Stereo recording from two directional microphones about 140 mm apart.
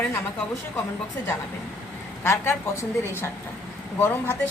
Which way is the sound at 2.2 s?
20° left (ahead or behind).